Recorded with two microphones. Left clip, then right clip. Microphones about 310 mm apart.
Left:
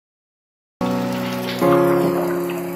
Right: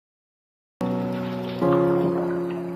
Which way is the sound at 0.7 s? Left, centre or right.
Left.